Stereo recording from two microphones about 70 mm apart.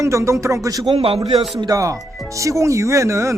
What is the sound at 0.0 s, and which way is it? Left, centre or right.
Speech, right.